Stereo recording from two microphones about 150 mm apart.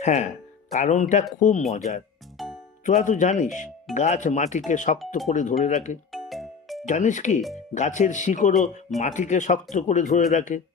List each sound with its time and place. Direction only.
0.0 s speech: 50° left (ahead or behind)
2.4 s music: centre (ahead or behind)
2.8 s speech: 60° left (ahead or behind)
6.1 s music: centre (ahead or behind)
6.8 s speech: 55° left (ahead or behind)